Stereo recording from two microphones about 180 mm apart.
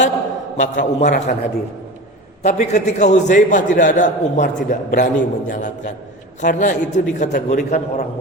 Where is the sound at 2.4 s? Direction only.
40° left (ahead or behind).